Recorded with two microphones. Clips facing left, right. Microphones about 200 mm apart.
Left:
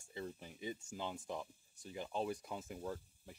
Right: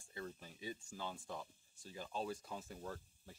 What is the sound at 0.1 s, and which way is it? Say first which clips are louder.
Speech: left 3 dB; 20° left (ahead or behind).